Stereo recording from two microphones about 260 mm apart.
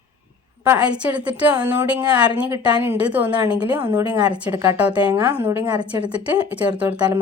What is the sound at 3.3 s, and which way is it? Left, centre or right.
A woman's voice, centre.